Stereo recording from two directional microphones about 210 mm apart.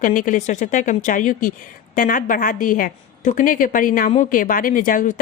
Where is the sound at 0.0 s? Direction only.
40° left (ahead or behind).